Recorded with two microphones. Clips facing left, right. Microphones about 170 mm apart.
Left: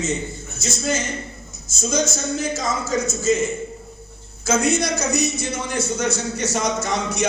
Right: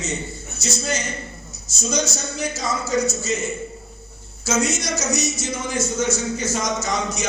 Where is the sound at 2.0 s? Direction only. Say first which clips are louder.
Left 3 dB; 50° left (ahead or behind).